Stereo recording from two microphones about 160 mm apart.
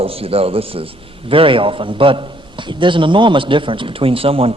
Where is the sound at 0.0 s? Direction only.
35° right (ahead or behind).